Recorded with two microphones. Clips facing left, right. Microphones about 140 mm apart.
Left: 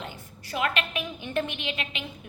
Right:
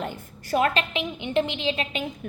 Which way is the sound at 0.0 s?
45° right (ahead or behind).